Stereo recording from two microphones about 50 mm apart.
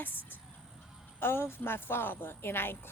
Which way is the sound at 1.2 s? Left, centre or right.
Left.